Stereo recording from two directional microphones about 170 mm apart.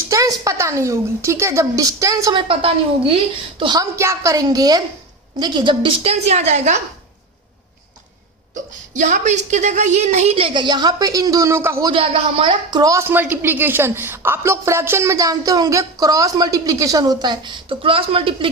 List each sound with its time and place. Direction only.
0.1 s a woman's voice: 20° right (ahead or behind)
2.5 s a woman's voice: 35° right (ahead or behind)
9.0 s a woman's voice: 45° right (ahead or behind); by 11.9 s 15° right (ahead or behind)
11.9 s a woman's voice: 30° right (ahead or behind)